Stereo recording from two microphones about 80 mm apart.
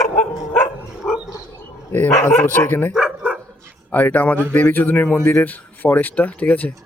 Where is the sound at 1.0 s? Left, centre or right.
Centre.